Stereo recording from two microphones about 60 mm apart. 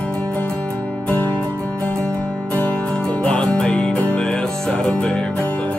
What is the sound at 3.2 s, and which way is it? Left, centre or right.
Music, centre.